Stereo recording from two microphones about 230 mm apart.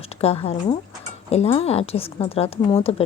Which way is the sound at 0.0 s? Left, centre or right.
Left.